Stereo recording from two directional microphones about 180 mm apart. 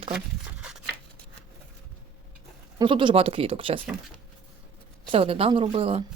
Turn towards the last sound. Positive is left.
turn(degrees=-30)  # may be behind; listen again after turning